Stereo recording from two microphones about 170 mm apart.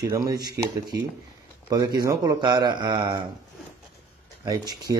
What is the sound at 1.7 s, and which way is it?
Speech, 20° right (ahead or behind).